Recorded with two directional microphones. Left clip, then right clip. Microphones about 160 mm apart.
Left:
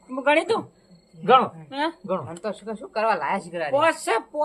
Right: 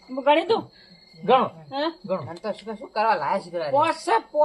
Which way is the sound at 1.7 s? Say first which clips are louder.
Even; 5° right (ahead or behind).